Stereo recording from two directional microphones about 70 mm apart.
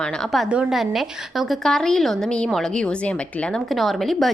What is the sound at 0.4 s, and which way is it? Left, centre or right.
Speech, centre.